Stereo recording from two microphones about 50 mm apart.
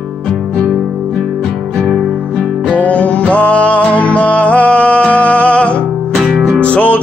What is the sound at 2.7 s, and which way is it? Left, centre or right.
Music, left.